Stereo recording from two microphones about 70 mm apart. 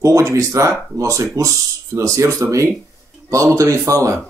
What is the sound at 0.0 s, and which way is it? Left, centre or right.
Speech, right.